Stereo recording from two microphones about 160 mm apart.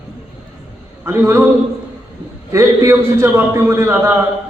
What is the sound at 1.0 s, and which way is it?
Speech, 15° right (ahead or behind).